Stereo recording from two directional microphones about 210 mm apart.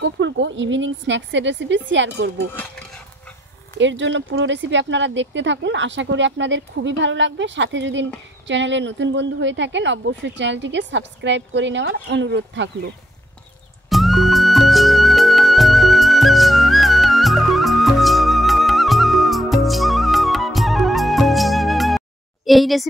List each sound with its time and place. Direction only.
0.0 s a woman's voice: 60° right (ahead or behind)
3.7 s a woman's voice: 60° right (ahead or behind)
13.8 s music: centre (ahead or behind)